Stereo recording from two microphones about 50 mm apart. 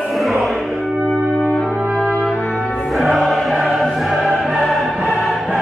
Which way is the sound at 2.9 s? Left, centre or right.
Centre.